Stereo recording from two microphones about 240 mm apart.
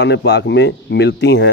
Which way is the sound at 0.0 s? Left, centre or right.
Left.